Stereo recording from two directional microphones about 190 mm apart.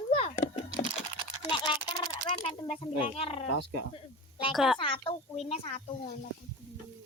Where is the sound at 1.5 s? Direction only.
25° left (ahead or behind).